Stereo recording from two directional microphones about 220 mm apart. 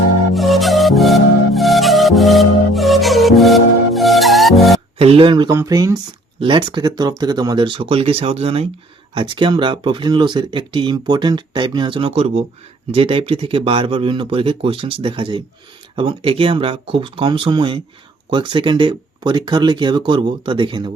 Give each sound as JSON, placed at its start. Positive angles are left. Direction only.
{"t": 0.3, "sound": "music", "side_deg": 0}
{"t": 4.9, "sound": "speech", "side_deg": -25}